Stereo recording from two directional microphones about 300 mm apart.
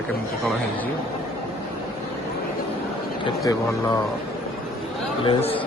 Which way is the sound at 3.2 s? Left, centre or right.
Centre.